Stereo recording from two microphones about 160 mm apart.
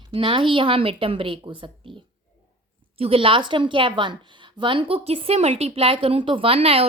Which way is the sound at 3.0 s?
35° right (ahead or behind).